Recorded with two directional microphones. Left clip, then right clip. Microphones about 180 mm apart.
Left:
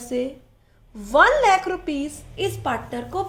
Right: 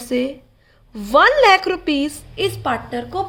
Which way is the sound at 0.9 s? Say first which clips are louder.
Right 3 dB; 50° right (ahead or behind).